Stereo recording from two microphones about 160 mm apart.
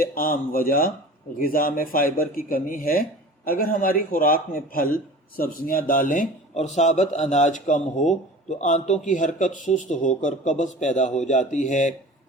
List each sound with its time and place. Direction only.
0.0 s speech: 65° left (ahead or behind)